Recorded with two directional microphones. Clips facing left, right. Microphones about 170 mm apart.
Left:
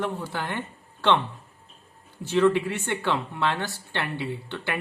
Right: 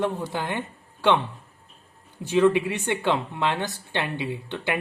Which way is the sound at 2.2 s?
15° right (ahead or behind).